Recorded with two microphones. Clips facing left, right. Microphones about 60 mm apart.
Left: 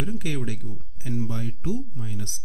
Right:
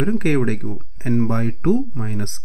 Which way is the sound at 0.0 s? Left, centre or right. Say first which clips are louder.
Right 11 dB; right.